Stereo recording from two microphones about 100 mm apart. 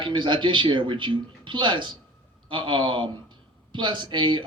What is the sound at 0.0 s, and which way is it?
A man's voice, 55° right (ahead or behind).